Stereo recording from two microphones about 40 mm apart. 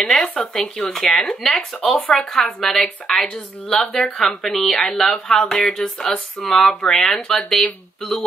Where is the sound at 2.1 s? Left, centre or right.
Centre.